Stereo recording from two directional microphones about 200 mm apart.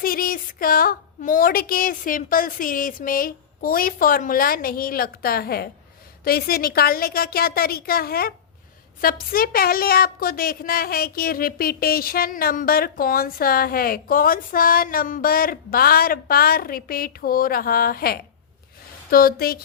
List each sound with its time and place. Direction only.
0.0 s a woman's voice: 45° left (ahead or behind)